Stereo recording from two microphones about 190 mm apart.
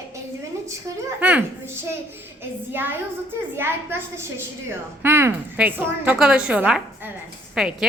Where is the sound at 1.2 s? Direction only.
10° right (ahead or behind).